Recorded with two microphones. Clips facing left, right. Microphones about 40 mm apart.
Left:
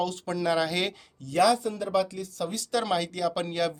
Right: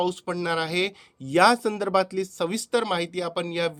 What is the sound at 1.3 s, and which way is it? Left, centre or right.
Speech, right.